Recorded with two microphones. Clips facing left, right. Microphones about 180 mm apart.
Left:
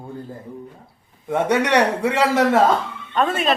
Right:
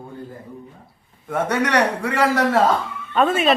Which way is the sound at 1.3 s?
20° left (ahead or behind).